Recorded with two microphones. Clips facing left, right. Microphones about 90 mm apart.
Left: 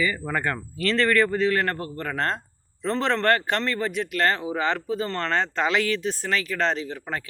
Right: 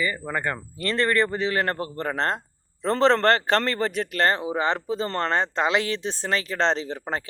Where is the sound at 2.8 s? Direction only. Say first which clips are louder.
Right 3 dB; 35° right (ahead or behind).